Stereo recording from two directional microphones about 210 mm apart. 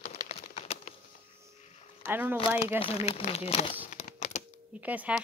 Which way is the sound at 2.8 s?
30° left (ahead or behind).